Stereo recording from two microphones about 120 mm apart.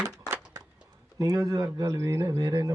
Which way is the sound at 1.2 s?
30° right (ahead or behind).